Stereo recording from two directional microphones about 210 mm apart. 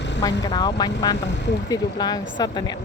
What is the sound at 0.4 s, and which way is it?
Speech, 20° left (ahead or behind).